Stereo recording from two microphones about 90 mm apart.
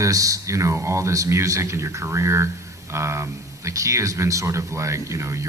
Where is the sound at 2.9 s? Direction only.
30° right (ahead or behind).